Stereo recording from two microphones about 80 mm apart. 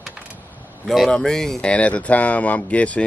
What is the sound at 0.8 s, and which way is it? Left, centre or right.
Speech, centre.